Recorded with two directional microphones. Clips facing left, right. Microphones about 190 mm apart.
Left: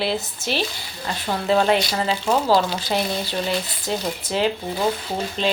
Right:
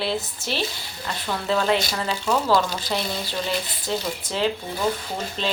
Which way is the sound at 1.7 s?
25° left (ahead or behind).